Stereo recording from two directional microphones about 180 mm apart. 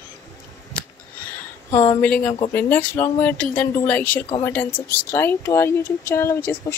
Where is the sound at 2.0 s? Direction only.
10° left (ahead or behind).